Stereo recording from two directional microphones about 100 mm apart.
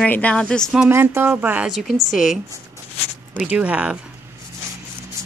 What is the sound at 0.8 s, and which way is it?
Speech, 25° right (ahead or behind).